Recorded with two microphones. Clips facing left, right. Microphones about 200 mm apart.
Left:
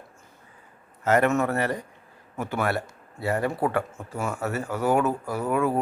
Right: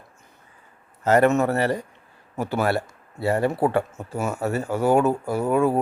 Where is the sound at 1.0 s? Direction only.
35° right (ahead or behind).